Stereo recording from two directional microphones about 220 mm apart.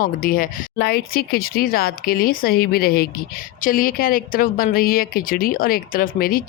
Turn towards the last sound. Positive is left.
turn(degrees=40)  # may be behind; listen again after turning